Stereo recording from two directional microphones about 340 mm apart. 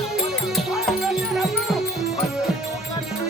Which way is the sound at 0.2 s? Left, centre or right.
Centre.